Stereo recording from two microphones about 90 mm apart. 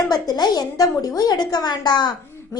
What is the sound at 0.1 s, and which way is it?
A woman's voice, 50° left (ahead or behind).